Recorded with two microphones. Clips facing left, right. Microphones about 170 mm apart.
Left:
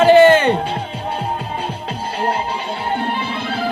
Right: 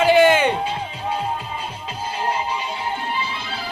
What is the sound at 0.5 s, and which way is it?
Music, 60° left (ahead or behind).